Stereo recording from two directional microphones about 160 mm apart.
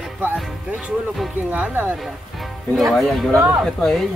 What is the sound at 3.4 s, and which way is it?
Speech, 10° right (ahead or behind).